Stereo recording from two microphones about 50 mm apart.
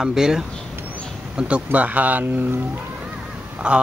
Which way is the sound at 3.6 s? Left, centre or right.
Right.